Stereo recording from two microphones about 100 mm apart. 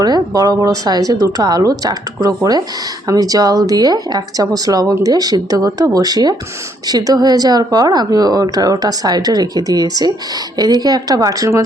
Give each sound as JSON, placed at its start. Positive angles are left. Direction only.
{"t": 0.0, "sound": "speech", "side_deg": -40}